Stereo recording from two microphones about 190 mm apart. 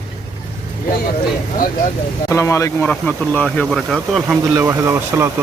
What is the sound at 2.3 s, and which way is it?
Speech, 15° left (ahead or behind).